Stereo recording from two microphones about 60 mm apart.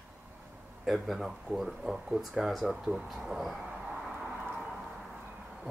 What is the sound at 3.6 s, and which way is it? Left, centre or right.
Vehicle, centre.